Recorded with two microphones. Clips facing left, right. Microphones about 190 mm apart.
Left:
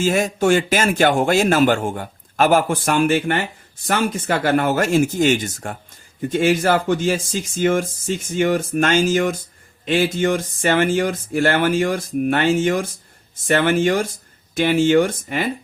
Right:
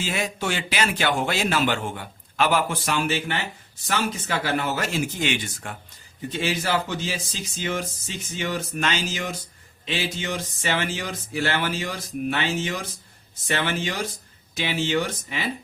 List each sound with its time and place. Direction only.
0.0 s a man's voice: 45° left (ahead or behind)